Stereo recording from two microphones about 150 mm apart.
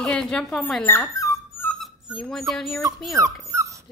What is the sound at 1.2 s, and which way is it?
Dog, 15° left (ahead or behind).